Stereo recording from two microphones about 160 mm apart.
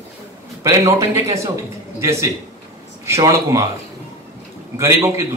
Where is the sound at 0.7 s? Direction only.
15° right (ahead or behind).